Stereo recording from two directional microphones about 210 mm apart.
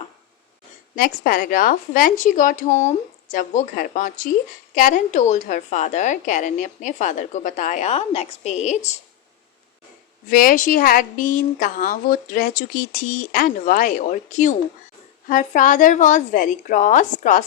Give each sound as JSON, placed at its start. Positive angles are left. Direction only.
{"t": 0.9, "sound": "a woman's voice", "side_deg": 40}
{"t": 10.2, "sound": "a woman's voice", "side_deg": 40}